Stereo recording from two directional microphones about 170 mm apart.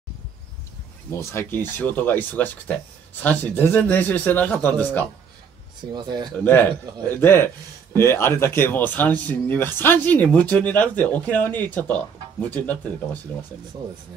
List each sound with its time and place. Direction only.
1.3 s speech: 15° left (ahead or behind)
5.9 s speech: 25° right (ahead or behind)
6.3 s speech: 10° left (ahead or behind)